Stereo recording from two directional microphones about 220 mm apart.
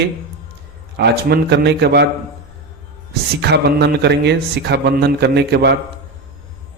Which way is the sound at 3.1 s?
50° right (ahead or behind).